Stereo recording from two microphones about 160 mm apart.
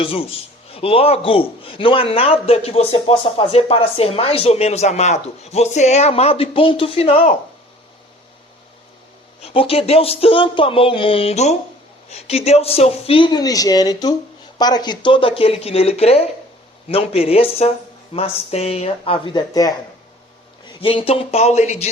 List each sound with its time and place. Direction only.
0.0 s a man's voice: 35° left (ahead or behind)
9.4 s a man's voice: 35° left (ahead or behind)
20.8 s a man's voice: 35° left (ahead or behind)